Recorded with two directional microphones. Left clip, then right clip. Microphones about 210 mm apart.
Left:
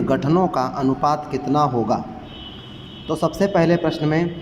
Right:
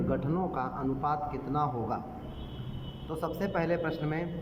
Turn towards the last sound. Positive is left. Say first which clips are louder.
# left 12 dB
turn(degrees=20)  # may be behind; listen again after turning